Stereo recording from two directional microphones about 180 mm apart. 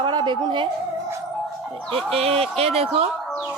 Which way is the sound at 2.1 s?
35° right (ahead or behind).